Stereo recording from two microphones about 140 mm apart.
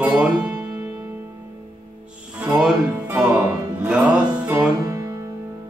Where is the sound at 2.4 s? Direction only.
10° right (ahead or behind).